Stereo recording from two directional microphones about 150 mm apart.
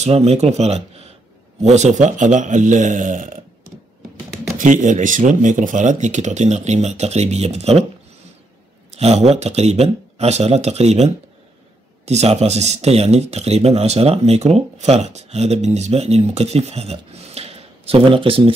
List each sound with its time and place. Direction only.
0.0 s a man's voice: 45° right (ahead or behind); by 3.4 s 65° right (ahead or behind)
4.6 s speech: 60° right (ahead or behind); by 7.8 s 45° right (ahead or behind)
8.9 s speech: 45° right (ahead or behind)